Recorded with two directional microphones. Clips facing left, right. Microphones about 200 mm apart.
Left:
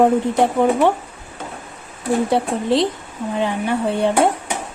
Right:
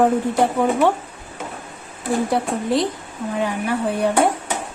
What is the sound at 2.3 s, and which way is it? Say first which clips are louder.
Speech: left 2 dB; 25° left (ahead or behind).